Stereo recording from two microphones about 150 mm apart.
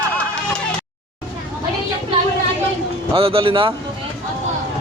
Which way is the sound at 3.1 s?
40° right (ahead or behind).